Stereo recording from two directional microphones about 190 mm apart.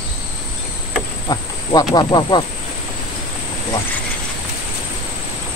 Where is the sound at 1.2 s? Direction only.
20° left (ahead or behind).